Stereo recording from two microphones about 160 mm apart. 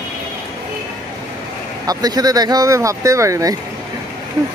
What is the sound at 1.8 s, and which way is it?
Speech, 25° right (ahead or behind).